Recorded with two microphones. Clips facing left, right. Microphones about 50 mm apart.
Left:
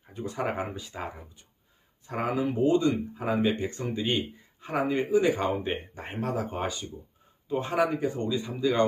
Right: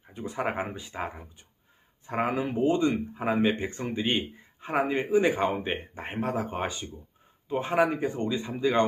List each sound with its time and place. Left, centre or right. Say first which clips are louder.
0.1 s speech: even; centre